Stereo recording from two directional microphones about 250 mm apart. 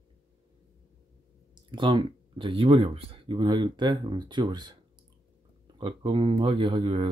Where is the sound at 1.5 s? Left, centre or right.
Centre.